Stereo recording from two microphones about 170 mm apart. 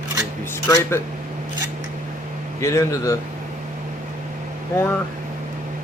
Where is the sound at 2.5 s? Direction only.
20° left (ahead or behind).